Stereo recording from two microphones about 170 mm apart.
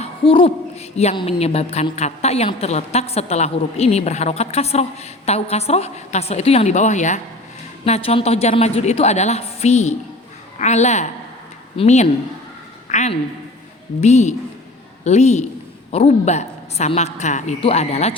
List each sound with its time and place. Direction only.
0.0 s hoot: 35° left (ahead or behind)
0.9 s a woman's voice: 35° left (ahead or behind)